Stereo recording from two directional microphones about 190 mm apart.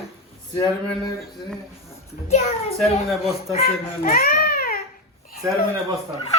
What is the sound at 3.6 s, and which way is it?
A child's voice, 45° left (ahead or behind).